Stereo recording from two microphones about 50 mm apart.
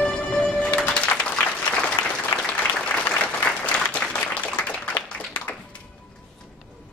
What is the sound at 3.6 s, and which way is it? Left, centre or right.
Applause, left.